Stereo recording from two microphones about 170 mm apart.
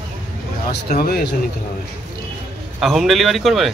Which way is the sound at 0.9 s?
65° left (ahead or behind).